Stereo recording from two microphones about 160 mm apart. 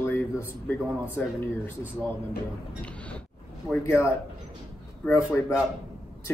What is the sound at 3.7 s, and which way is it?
Speech, 15° left (ahead or behind).